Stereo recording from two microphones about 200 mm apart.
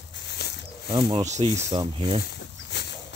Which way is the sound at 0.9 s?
25° right (ahead or behind).